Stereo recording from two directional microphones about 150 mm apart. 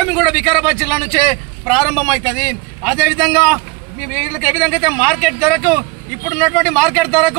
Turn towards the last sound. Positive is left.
turn(degrees=0)  # may be behind; listen again after turning